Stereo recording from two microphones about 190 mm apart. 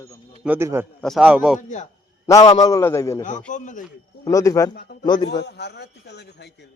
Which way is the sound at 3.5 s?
40° left (ahead or behind).